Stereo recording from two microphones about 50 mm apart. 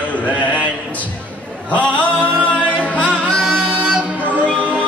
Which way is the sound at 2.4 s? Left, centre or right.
Left.